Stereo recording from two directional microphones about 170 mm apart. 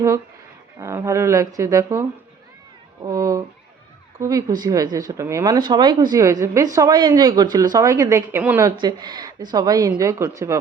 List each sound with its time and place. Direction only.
0.8 s speech: 15° right (ahead or behind)